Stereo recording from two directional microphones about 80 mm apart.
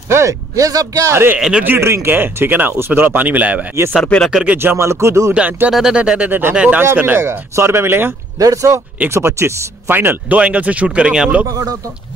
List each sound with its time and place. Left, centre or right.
0.1 s speech: right; by 3.6 s centre
3.9 s speech: centre
4.3 s speech: centre
4.6 s speech: right
5.3 s speech: centre
5.7 s speech: centre
6.8 s speech: right
8.4 s speech: right; by 11.4 s centre
11.4 s speech: right